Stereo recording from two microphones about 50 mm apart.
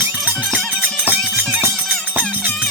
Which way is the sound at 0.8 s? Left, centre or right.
Right.